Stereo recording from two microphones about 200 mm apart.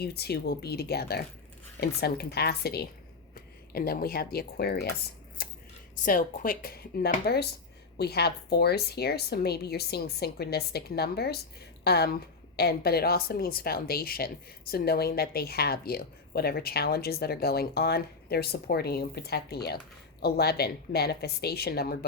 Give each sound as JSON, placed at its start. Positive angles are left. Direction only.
{"t": 0.0, "sound": "a woman's voice", "side_deg": 55}
{"t": 5.4, "sound": "scissors", "side_deg": 50}
{"t": 6.1, "sound": "a woman's voice", "side_deg": 45}